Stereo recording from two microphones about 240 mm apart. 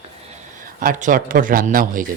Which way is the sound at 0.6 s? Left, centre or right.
Right.